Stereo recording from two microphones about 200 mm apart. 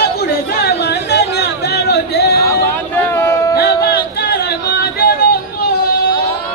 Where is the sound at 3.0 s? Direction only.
10° left (ahead or behind).